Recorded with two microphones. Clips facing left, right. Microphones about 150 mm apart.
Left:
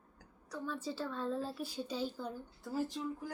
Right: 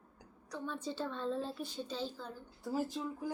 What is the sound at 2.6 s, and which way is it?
Speech, 15° right (ahead or behind).